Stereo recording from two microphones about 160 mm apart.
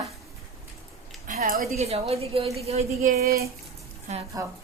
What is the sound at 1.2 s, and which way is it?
Speech, 65° right (ahead or behind).